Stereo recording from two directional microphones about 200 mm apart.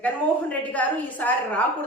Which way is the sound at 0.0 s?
5° left (ahead or behind).